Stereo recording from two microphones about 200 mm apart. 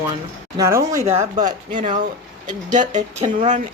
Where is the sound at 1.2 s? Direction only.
40° right (ahead or behind).